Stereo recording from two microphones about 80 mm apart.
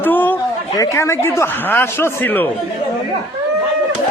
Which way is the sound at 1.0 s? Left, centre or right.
Left.